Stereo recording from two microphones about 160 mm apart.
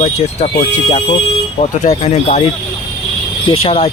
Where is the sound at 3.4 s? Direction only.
35° left (ahead or behind).